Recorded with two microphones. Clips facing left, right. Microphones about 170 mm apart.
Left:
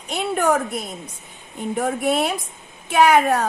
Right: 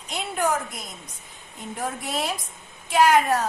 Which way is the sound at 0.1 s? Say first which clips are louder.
Left 6 dB; 65° left (ahead or behind).